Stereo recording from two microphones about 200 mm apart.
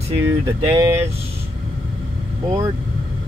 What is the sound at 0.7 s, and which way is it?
Speech, 15° right (ahead or behind).